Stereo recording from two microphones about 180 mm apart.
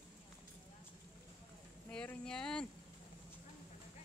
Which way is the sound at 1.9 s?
5° left (ahead or behind).